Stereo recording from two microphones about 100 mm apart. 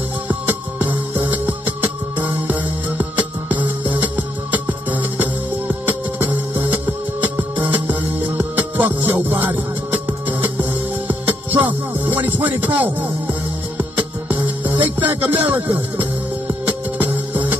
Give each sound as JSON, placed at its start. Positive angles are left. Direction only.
{"t": 0.3, "sound": "music", "side_deg": -15}